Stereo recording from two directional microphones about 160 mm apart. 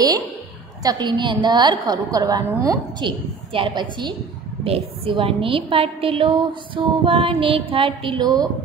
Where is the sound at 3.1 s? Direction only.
30° right (ahead or behind).